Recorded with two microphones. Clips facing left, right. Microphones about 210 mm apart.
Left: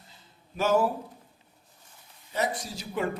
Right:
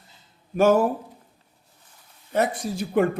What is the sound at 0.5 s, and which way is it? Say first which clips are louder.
Speech: right 6 dB; 50° right (ahead or behind).